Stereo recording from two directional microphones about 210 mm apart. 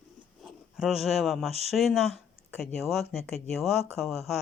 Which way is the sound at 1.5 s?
30° right (ahead or behind).